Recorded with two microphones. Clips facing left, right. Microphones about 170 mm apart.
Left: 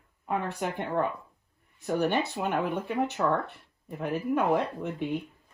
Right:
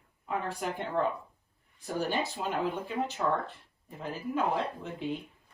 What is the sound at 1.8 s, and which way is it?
Speech, 65° left (ahead or behind).